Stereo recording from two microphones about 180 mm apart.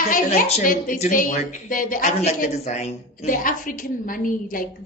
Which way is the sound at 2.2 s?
40° left (ahead or behind).